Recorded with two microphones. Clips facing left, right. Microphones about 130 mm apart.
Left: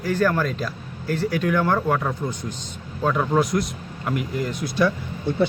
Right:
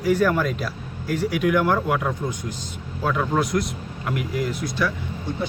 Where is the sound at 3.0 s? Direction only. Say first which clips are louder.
Left 2 dB; 5° left (ahead or behind).